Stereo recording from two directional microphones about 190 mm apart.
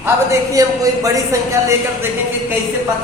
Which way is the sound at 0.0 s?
15° right (ahead or behind).